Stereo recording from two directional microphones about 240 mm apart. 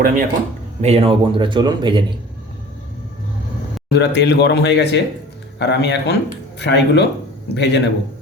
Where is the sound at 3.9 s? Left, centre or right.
Left.